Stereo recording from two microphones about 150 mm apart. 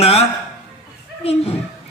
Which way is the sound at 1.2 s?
45° left (ahead or behind).